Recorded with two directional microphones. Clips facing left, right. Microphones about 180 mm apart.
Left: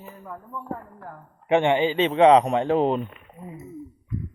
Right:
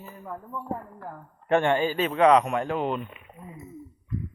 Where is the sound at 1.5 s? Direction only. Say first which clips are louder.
Left 3 dB; 20° left (ahead or behind); by 3.1 s 35° left (ahead or behind).